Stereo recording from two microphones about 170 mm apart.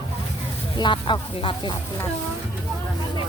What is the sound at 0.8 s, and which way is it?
Speech, 25° left (ahead or behind).